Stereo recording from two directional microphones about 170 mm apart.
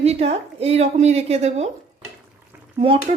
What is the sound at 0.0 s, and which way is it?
A woman's voice, 40° right (ahead or behind).